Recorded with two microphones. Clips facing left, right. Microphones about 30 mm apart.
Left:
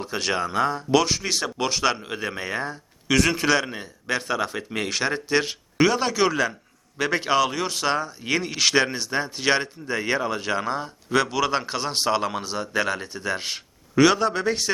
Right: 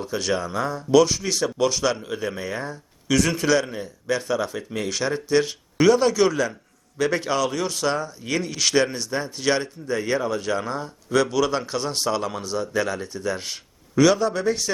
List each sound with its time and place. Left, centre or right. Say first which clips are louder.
0.0 s speech: even; left